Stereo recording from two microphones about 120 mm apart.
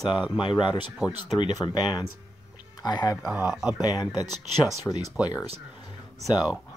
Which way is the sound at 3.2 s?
15° right (ahead or behind).